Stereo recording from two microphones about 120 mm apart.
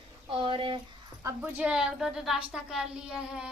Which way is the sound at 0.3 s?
45° right (ahead or behind).